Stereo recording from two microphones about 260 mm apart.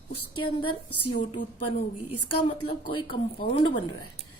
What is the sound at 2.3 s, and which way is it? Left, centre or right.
Speech, left.